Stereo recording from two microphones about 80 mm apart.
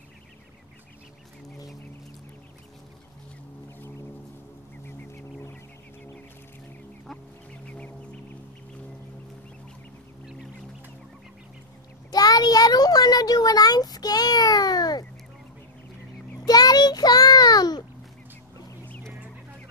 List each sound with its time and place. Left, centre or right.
7.6 s music: centre
12.1 s a sound: left
16.4 s child singing: left